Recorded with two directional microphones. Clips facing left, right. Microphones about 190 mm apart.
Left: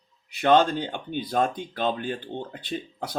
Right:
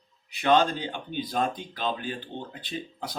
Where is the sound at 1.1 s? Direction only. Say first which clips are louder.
Left 3 dB; 55° left (ahead or behind).